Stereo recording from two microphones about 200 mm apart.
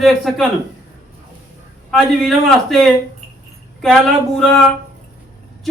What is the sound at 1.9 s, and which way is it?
A man's voice, centre (ahead or behind).